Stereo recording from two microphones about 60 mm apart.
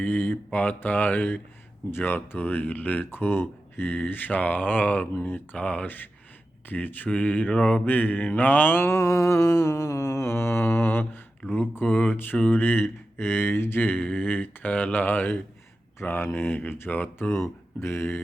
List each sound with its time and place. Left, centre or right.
0.0 s speech: left
5.5 s mantra: left
6.7 s speech: left
7.1 s mantra: left
8.9 s mantra: left
11.5 s speech: left